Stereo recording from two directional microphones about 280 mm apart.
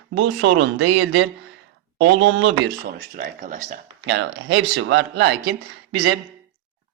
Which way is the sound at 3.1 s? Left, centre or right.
Right.